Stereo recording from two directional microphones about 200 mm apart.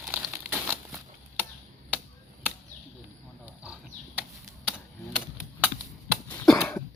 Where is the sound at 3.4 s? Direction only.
5° right (ahead or behind).